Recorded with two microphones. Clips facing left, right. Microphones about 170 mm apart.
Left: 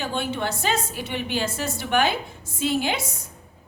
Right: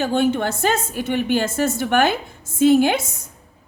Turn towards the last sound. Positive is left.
turn(degrees=-50)  # may be behind; listen again after turning